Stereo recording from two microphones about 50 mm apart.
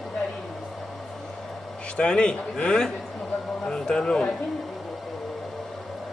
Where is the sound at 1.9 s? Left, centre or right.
Centre.